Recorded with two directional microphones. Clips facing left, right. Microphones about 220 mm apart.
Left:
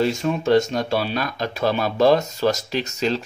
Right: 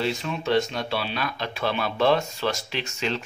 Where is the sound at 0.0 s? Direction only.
45° left (ahead or behind).